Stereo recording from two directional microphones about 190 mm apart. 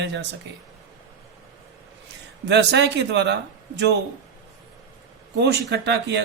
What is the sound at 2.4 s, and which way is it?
Speech, 65° right (ahead or behind).